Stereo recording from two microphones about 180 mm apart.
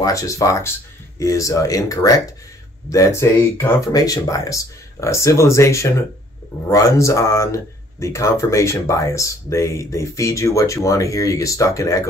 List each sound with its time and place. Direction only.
0.0 s speech: 20° left (ahead or behind)